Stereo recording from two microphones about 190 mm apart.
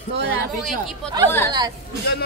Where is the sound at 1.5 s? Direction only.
20° right (ahead or behind).